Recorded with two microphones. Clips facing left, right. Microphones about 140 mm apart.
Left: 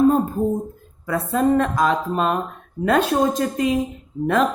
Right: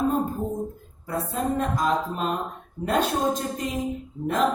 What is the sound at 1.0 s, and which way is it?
Speech, 90° left.